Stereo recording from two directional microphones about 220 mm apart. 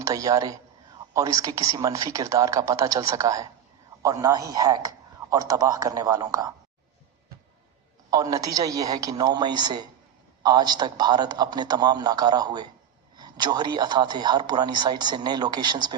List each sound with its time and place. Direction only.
0.0 s a man's voice: 15° right (ahead or behind)
8.1 s a man's voice: 15° right (ahead or behind)